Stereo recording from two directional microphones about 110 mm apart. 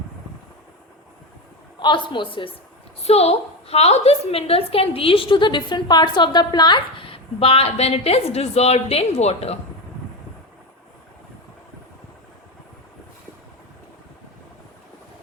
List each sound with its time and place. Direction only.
1.8 s a woman's voice: 45° left (ahead or behind)
3.0 s a woman's voice: 70° left (ahead or behind)